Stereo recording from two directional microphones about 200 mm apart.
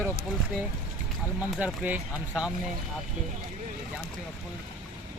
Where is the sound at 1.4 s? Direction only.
5° right (ahead or behind).